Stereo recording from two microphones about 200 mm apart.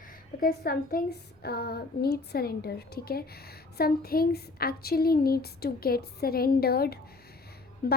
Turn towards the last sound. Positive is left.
turn(degrees=50)  # may be behind; listen again after turning